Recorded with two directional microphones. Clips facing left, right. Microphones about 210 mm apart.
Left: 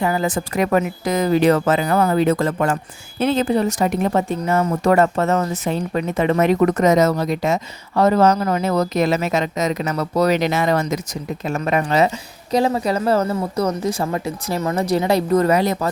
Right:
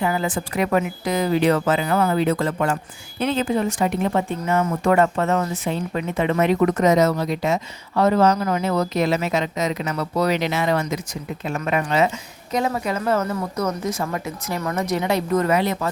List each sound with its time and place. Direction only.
0.0 s speech: 40° left (ahead or behind)